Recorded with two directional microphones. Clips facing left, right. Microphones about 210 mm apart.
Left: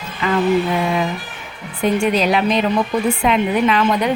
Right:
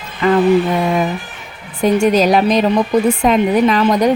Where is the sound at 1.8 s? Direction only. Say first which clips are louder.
Right 4 dB; 45° right (ahead or behind).